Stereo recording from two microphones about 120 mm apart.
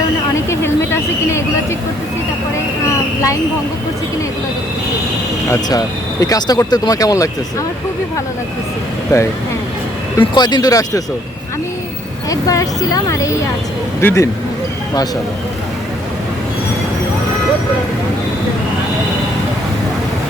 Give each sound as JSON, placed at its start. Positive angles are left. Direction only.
{"t": 0.3, "sound": "vehicle", "side_deg": 20}
{"t": 5.6, "sound": "speech", "side_deg": 30}
{"t": 9.1, "sound": "speech", "side_deg": 30}
{"t": 10.3, "sound": "speech", "side_deg": 35}
{"t": 12.3, "sound": "speech", "side_deg": 30}